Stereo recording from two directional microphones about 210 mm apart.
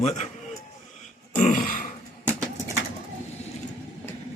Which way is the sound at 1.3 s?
35° left (ahead or behind).